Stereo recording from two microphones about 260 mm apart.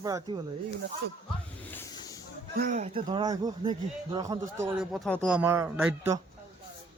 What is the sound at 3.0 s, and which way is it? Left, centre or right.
A man's voice, centre.